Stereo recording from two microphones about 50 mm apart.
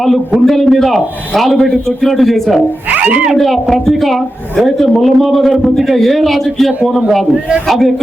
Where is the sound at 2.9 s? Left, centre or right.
Right.